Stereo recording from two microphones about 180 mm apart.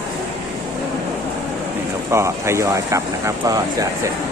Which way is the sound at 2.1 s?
15° right (ahead or behind).